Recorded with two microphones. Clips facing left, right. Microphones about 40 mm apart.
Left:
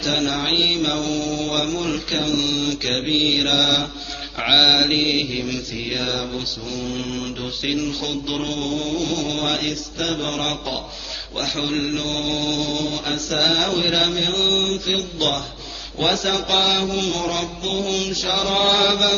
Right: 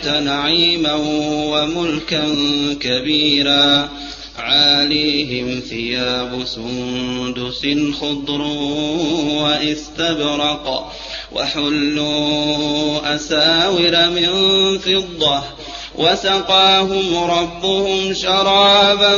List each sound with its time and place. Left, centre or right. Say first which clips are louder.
0.0 s mantra: right 4 dB; right
4.4 s mantra: right 1 dB; centre; by 5.6 s right
5.8 s mantra: right 6 dB; right